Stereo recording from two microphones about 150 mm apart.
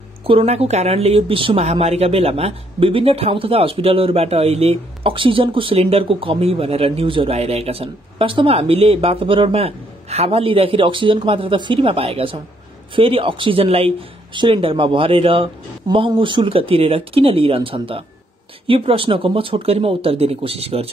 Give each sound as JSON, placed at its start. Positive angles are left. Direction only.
{"t": 0.3, "sound": "speech", "side_deg": -40}